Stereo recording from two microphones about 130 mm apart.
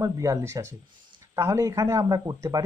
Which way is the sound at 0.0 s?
25° right (ahead or behind).